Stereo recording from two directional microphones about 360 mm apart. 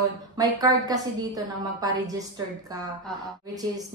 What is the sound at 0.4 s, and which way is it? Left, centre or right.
Speech, centre.